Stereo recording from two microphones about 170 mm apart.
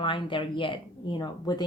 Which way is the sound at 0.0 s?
30° left (ahead or behind).